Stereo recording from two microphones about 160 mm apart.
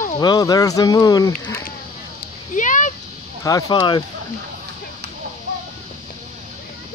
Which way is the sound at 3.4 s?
25° left (ahead or behind).